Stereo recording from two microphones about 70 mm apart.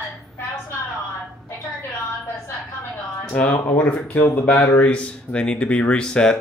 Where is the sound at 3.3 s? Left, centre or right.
Left.